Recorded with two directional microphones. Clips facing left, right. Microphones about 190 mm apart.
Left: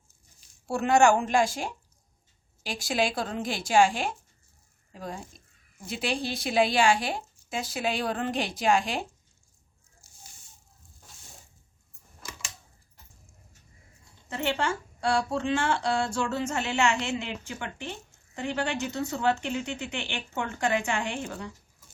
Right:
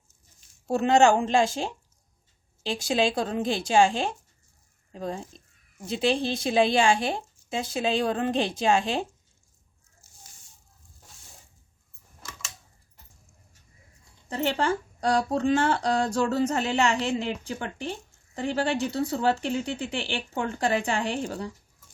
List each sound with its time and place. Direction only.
0.7 s speech: 20° right (ahead or behind)
14.3 s speech: 35° right (ahead or behind)